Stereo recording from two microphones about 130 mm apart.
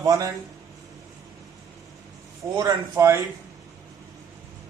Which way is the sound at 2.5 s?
30° right (ahead or behind).